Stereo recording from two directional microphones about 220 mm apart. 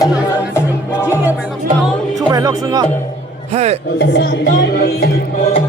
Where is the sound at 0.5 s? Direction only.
10° left (ahead or behind).